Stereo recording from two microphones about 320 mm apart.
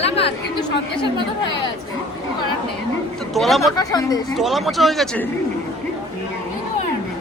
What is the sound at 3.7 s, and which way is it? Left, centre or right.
Speech, centre.